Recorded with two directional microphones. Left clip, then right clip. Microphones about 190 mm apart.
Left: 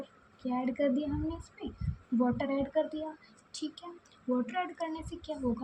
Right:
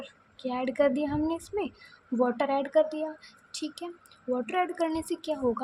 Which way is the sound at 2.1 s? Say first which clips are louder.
Right 5 dB; 30° right (ahead or behind).